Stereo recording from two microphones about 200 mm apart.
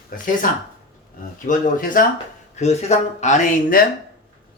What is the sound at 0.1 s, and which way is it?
Speech, 45° left (ahead or behind).